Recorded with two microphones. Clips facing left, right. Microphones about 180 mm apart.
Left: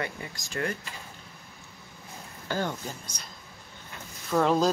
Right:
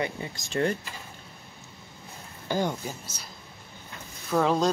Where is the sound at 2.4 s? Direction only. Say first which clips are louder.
Right 3 dB; 15° right (ahead or behind).